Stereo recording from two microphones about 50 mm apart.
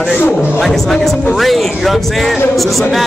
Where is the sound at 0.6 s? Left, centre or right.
Centre.